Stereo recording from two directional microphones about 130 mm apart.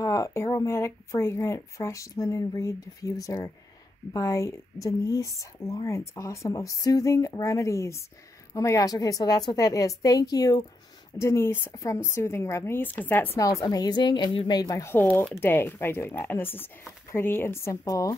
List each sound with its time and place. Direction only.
0.0 s speech: 25° left (ahead or behind)